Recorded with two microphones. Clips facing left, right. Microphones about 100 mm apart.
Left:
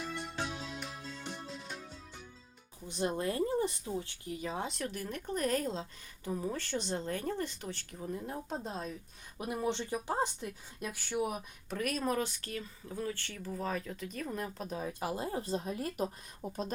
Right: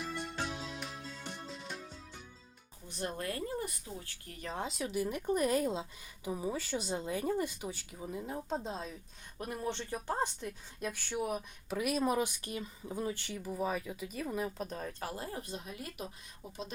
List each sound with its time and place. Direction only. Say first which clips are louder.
0.0 s music: even; centre (ahead or behind)
2.8 s speech: left 5 dB; 20° left (ahead or behind)
4.5 s a woman's voice: right 2 dB; centre (ahead or behind)
9.4 s speech: left 3 dB; 10° left (ahead or behind)
11.8 s a woman's voice: right 2 dB; 10° right (ahead or behind); by 16.7 s 45° left (ahead or behind)